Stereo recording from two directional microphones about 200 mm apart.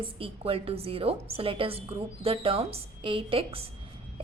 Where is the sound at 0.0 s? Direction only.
30° right (ahead or behind).